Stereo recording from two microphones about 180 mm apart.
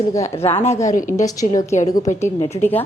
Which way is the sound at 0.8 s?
45° left (ahead or behind).